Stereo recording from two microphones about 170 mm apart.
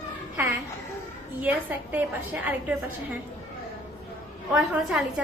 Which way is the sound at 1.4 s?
10° right (ahead or behind).